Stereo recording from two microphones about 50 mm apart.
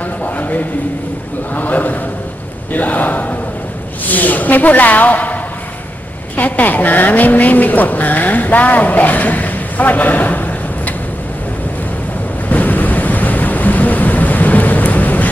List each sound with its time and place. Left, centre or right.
0.2 s a sound: left
1.5 s a woman's voice: left
12.4 s waves: left